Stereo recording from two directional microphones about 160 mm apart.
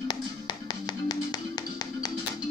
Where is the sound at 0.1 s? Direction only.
25° left (ahead or behind).